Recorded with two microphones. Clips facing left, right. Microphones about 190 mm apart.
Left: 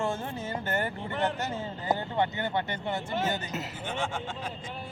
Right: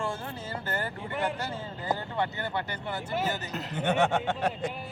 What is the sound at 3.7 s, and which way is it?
Speech, 65° right (ahead or behind).